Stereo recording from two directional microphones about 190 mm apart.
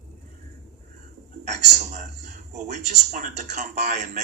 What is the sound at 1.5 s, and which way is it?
A man's voice, 40° right (ahead or behind).